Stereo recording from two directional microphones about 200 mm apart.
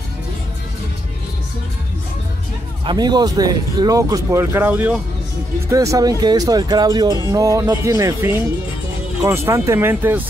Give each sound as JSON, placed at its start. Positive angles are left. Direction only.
{"t": 2.8, "sound": "speech", "side_deg": -20}